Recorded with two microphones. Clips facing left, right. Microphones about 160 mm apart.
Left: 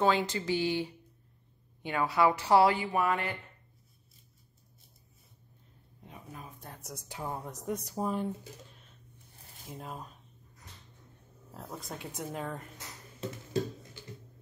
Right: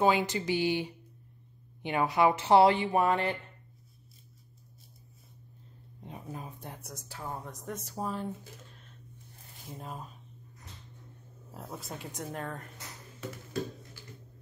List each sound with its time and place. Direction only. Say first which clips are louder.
0.0 s speech: right 1 dB; 15° right (ahead or behind)
6.0 s speech: right 5 dB; 30° right (ahead or behind)
7.1 s speech: left 2 dB; 15° left (ahead or behind)
9.7 s speech: even; centre (ahead or behind)
11.5 s speech: even; centre (ahead or behind)
13.2 s a sound: left 3 dB; 25° left (ahead or behind)